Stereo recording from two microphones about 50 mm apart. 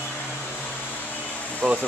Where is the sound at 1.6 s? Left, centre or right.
Right.